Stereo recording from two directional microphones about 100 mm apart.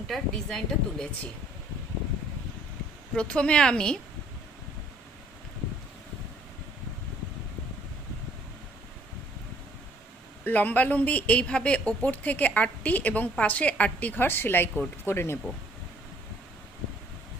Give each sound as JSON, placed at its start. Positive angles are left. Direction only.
{"t": 0.1, "sound": "speech", "side_deg": 5}
{"t": 3.2, "sound": "speech", "side_deg": 10}
{"t": 10.4, "sound": "speech", "side_deg": 15}